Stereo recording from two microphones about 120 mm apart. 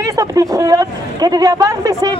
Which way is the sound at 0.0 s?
30° right (ahead or behind).